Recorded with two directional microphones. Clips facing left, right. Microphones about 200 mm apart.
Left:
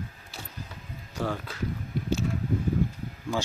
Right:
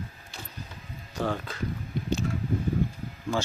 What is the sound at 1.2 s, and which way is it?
Speech, 5° left (ahead or behind).